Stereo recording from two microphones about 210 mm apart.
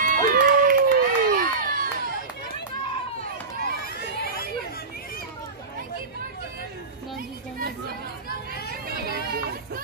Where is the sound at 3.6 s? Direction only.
45° left (ahead or behind).